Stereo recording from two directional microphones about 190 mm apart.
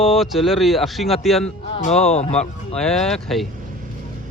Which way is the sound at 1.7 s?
35° left (ahead or behind).